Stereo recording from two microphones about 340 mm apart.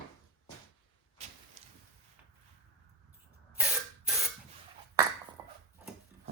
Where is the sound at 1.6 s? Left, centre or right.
Centre.